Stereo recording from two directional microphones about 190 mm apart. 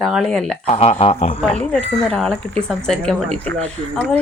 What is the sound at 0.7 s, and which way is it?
Speech, 30° left (ahead or behind).